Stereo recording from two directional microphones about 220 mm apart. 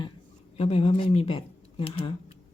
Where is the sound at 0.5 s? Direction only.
25° left (ahead or behind).